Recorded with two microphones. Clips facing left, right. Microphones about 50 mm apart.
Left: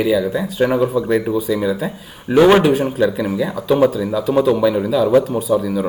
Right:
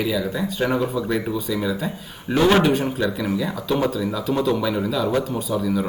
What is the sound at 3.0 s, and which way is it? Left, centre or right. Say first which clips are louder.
Speech: left 6 dB; centre.